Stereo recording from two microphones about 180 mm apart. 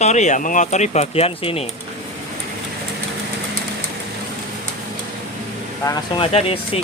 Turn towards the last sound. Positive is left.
turn(degrees=30)  # may be behind; listen again after turning